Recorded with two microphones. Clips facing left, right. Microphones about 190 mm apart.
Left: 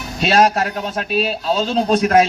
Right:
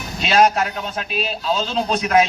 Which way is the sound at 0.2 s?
40° left (ahead or behind).